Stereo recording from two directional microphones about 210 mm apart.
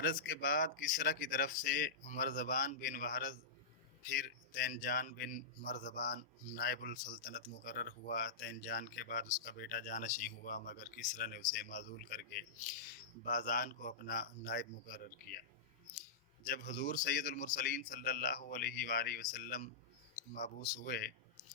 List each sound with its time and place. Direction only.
0.0 s a man's voice: 45° left (ahead or behind)
16.5 s a man's voice: 40° left (ahead or behind)
20.7 s speech: 45° left (ahead or behind)